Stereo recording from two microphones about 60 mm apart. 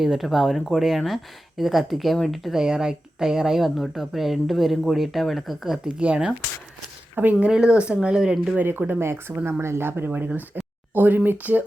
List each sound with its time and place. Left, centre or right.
0.0 s speech: centre
6.0 s speech: centre
7.3 s speech: centre
8.5 s speech: right